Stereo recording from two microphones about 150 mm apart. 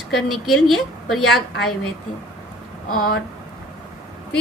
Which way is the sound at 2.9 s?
85° left.